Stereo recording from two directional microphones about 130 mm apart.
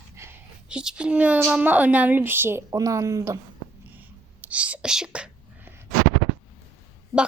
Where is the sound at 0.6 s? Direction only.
5° right (ahead or behind); by 3.4 s 25° right (ahead or behind).